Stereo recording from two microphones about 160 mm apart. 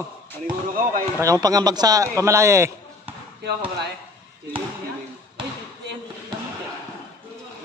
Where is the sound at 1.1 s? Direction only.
20° right (ahead or behind).